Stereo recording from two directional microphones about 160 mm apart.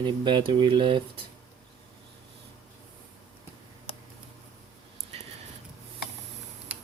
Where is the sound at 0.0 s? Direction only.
30° right (ahead or behind).